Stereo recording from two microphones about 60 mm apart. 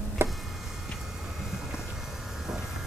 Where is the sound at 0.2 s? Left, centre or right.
Right.